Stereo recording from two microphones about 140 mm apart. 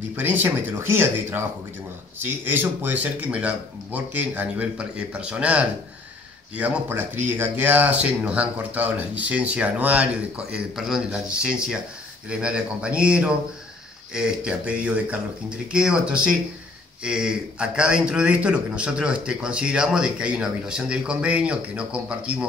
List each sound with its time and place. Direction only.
0.1 s a man's voice: 15° right (ahead or behind)